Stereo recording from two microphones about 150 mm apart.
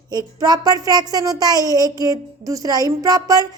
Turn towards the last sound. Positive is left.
turn(degrees=-25)  # may be behind; listen again after turning